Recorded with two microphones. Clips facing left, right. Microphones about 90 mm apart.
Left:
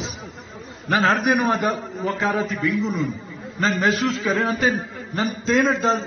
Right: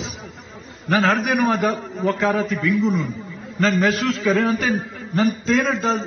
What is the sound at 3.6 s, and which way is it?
Speech, 20° left (ahead or behind).